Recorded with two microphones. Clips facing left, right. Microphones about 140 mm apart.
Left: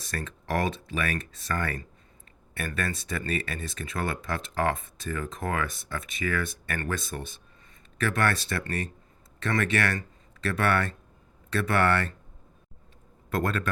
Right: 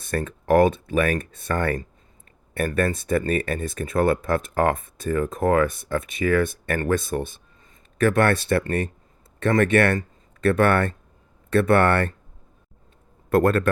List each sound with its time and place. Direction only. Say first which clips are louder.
0.1 s speech: right 11 dB; 50° right (ahead or behind)
13.3 s speech: right 10 dB; 45° right (ahead or behind)